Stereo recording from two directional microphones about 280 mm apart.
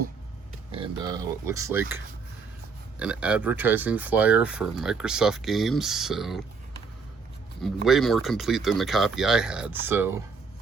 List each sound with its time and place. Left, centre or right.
0.7 s speech: centre
3.0 s speech: centre
7.9 s speech: centre